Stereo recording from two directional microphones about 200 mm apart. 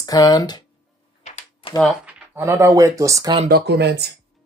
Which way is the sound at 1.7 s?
Centre (ahead or behind).